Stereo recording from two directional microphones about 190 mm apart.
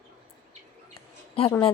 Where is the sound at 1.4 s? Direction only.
30° left (ahead or behind).